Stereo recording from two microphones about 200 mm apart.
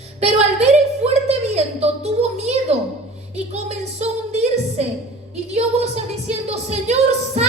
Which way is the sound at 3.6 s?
35° right (ahead or behind).